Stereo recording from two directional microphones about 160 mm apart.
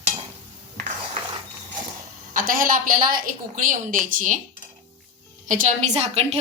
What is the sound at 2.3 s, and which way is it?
A woman's voice, 60° right (ahead or behind).